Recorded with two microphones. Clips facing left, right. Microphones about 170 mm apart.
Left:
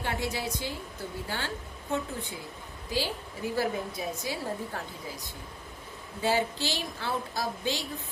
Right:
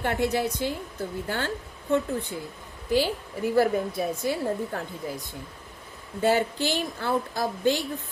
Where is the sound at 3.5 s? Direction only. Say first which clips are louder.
Right 8 dB; 55° right (ahead or behind).